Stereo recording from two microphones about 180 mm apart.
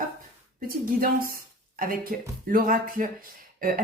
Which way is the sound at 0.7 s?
50° right (ahead or behind).